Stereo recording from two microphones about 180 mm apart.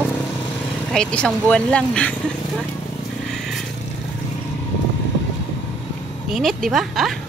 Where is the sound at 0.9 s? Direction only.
5° left (ahead or behind).